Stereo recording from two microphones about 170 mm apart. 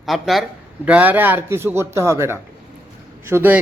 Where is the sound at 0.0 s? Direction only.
Centre (ahead or behind).